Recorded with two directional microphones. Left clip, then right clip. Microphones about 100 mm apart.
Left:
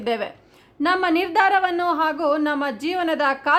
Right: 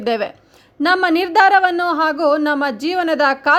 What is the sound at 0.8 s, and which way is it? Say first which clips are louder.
A woman's voice: right 5 dB; 50° right (ahead or behind).